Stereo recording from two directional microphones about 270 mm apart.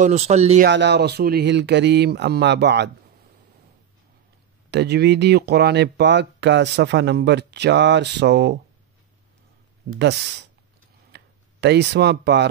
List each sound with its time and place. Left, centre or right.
0.0 s speech: right
0.7 s speech: right
4.6 s speech: right
9.9 s speech: right
11.1 s a sound: right